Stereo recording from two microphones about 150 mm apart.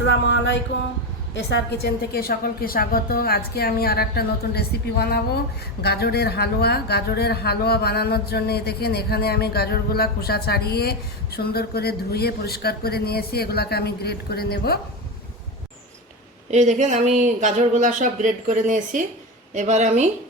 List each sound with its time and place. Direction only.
1.7 s speech: 90° left
16.5 s speech: 50° right (ahead or behind)